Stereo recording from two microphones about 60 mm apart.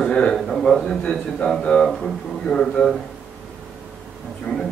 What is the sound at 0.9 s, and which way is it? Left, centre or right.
A man's voice, centre.